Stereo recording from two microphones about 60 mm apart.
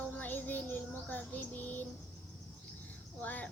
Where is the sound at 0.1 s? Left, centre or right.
Left.